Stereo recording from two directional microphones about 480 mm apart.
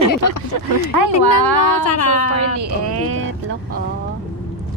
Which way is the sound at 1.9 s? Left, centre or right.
Left.